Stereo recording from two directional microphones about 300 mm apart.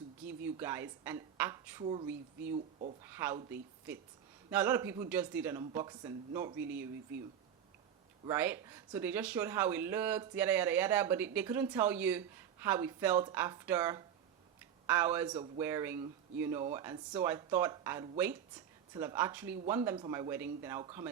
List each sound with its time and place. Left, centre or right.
0.3 s speech: centre
2.0 s speech: centre
8.2 s speech: centre